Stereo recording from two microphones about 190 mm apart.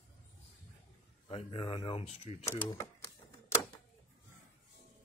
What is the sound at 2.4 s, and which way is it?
Speech, 15° left (ahead or behind).